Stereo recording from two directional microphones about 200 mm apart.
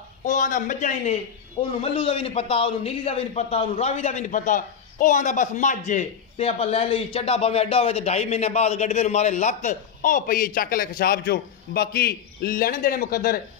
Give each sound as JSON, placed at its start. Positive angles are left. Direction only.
{"t": 0.2, "sound": "a man's voice", "side_deg": 40}